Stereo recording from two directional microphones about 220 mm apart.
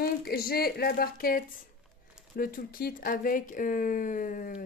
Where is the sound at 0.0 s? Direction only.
45° left (ahead or behind).